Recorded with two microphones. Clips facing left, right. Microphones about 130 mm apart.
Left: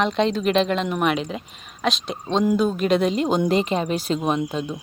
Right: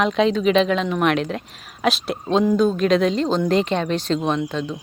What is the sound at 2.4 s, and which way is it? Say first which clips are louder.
Speech: right 1 dB; 10° left (ahead or behind).